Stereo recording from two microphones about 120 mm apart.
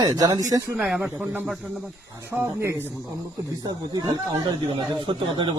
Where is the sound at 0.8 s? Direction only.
5° right (ahead or behind).